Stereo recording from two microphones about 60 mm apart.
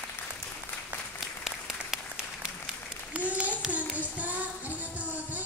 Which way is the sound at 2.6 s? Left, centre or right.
Right.